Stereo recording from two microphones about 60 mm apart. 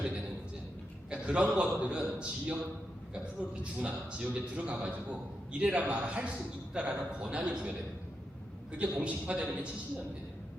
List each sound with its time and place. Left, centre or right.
1.1 s a man's voice: centre
8.8 s a man's voice: right